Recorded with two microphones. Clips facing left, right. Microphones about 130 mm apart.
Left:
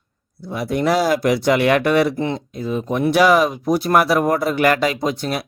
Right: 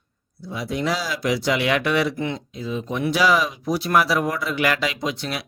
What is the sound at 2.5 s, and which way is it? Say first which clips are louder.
Speech: left 5 dB; 50° left (ahead or behind).